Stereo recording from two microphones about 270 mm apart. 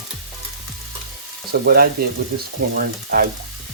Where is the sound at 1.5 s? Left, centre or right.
Right.